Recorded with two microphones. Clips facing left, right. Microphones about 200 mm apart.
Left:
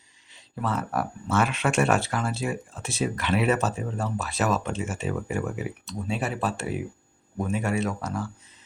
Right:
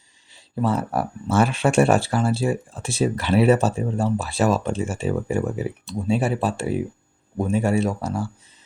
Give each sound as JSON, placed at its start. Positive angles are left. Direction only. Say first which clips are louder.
{"t": 0.3, "sound": "speech", "louder": "right 6 dB", "side_deg": -30}